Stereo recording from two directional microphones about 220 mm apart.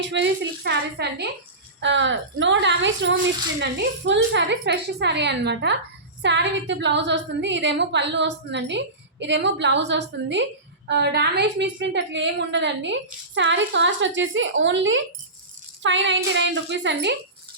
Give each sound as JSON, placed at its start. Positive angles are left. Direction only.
{"t": 0.0, "sound": "a woman's voice", "side_deg": -55}